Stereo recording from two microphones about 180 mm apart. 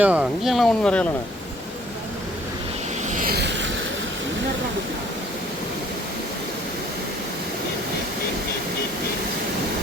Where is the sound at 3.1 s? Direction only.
60° right (ahead or behind).